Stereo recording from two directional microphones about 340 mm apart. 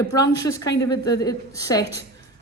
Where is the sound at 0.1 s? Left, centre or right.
Centre.